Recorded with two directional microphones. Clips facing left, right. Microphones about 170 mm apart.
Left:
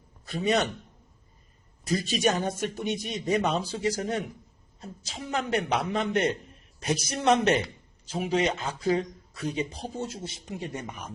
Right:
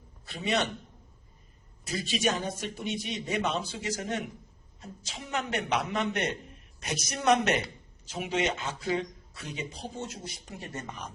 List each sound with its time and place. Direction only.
0.3 s a man's voice: 40° left (ahead or behind)
1.9 s a man's voice: 40° left (ahead or behind); by 11.1 s 10° left (ahead or behind)